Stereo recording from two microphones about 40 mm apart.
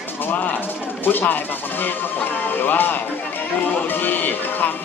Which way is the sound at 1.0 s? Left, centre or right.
Left.